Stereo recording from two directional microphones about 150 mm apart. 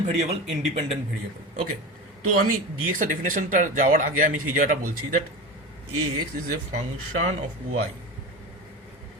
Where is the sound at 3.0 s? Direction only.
60° right (ahead or behind).